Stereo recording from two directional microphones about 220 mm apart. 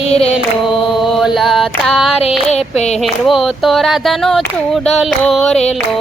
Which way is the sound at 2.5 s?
30° left (ahead or behind).